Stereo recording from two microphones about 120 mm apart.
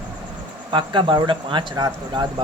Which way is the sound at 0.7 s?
40° right (ahead or behind).